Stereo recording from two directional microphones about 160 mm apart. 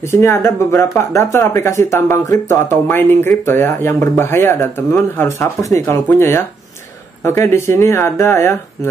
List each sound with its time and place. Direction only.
0.1 s speech: 15° left (ahead or behind)